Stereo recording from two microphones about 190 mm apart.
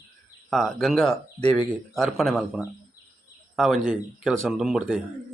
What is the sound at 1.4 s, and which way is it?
Speech, 35° right (ahead or behind).